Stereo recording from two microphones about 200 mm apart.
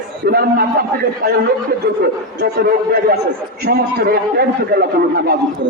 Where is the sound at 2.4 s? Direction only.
50° right (ahead or behind).